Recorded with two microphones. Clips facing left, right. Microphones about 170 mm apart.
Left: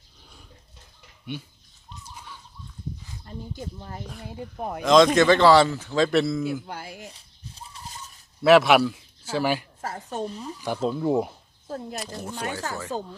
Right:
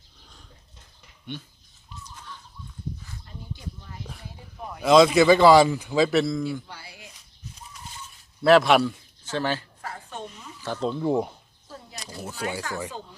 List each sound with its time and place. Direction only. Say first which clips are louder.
1.3 s speech: left 2 dB; 5° left (ahead or behind)
2.1 s a sound: even; 10° left (ahead or behind)
3.2 s speech: left 5 dB; 45° left (ahead or behind)
4.8 s a man's voice: right 1 dB; 5° right (ahead or behind)
6.7 s a sound: left 7 dB; 50° left (ahead or behind)
7.1 s a sound: even; 30° left (ahead or behind)
8.4 s a man's voice: left 1 dB; centre (ahead or behind)
9.8 s a woman's voice: left 6 dB; 40° left (ahead or behind)
10.6 s a man's voice: left 1 dB; 10° left (ahead or behind); by 12.6 s 10° right (ahead or behind)